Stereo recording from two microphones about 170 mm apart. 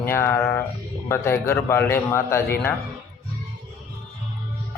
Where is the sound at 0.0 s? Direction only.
15° left (ahead or behind).